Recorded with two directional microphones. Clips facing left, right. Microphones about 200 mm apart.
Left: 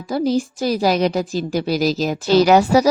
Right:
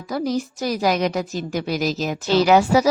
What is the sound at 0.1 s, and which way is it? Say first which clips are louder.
A woman's voice: left 4 dB; 30° left (ahead or behind).